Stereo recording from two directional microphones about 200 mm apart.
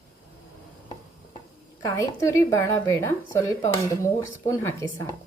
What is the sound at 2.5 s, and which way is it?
Speech, 15° left (ahead or behind).